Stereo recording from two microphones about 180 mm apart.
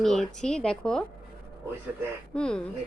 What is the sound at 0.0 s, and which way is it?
A woman's voice, centre (ahead or behind).